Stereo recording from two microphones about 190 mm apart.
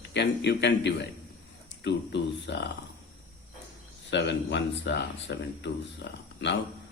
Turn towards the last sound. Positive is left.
turn(degrees=65)  # may be behind; listen again after turning